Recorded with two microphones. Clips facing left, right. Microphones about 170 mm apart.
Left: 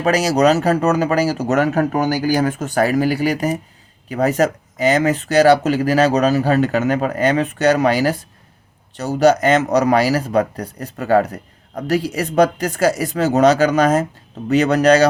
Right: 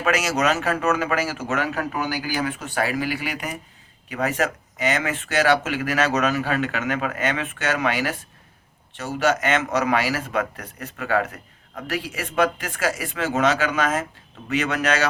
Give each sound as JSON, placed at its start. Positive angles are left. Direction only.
{"t": 0.0, "sound": "speech", "side_deg": 35}